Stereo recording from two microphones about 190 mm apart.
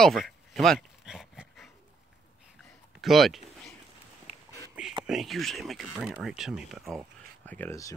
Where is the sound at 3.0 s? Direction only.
Centre (ahead or behind).